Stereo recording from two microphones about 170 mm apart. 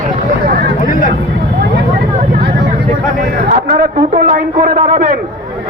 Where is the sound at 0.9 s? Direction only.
55° left (ahead or behind).